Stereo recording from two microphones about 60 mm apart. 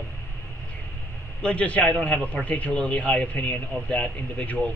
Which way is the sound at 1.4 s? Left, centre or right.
Left.